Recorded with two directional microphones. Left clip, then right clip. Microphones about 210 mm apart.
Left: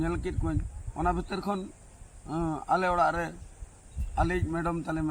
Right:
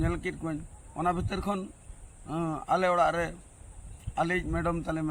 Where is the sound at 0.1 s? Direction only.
10° right (ahead or behind).